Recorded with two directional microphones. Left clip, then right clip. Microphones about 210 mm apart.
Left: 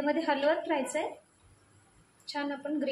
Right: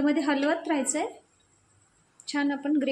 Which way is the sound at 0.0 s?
55° right (ahead or behind).